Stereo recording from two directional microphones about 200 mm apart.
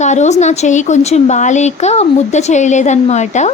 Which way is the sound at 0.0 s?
35° left (ahead or behind).